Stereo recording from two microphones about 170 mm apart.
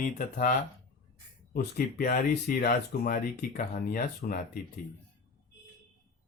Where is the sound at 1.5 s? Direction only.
55° left (ahead or behind).